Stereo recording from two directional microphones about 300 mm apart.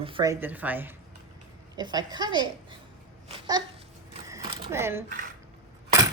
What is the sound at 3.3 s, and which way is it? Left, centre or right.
Babbling, centre.